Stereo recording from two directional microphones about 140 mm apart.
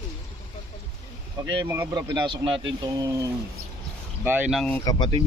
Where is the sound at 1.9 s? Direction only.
30° right (ahead or behind).